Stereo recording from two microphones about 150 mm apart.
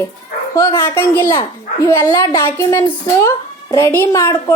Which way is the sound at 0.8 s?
15° left (ahead or behind).